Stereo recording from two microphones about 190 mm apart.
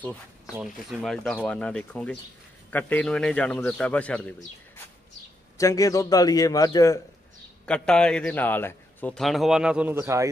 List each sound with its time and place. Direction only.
0.6 s speech: centre (ahead or behind)
5.6 s speech: 15° left (ahead or behind)
7.6 s speech: 5° left (ahead or behind); by 10.3 s 15° right (ahead or behind)